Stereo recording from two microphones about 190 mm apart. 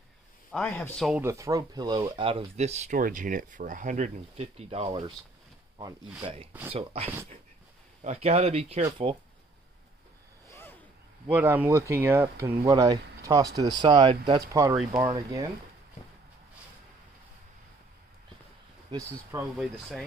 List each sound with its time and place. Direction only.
0.5 s a man's voice: 5° left (ahead or behind)
1.2 s speech: 15° right (ahead or behind)
6.2 s speech: 30° right (ahead or behind)
10.5 s a sound: 10° left (ahead or behind)
11.2 s speech: 10° right (ahead or behind)
18.9 s speech: 20° right (ahead or behind)
19.5 s a man's voice: centre (ahead or behind)